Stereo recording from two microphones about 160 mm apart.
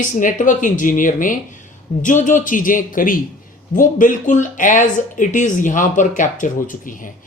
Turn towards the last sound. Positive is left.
turn(degrees=55)  # may be behind; listen again after turning